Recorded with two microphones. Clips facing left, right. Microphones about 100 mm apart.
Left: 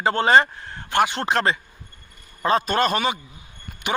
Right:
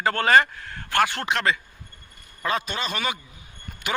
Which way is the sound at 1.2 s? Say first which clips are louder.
Left 3 dB; 35° left (ahead or behind).